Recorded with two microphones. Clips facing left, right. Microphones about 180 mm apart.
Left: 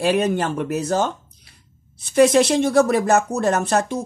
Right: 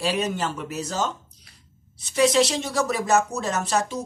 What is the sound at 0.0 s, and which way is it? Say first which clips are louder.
Speech: left 6 dB; 55° left (ahead or behind).